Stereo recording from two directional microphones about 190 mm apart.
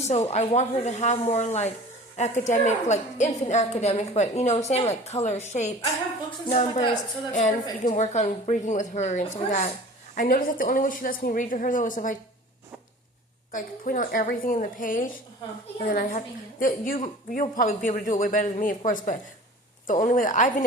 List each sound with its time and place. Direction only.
0.0 s a woman's voice: 35° left (ahead or behind)
10.2 s a woman's voice: 45° left (ahead or behind)
13.5 s a woman's voice: 45° left (ahead or behind)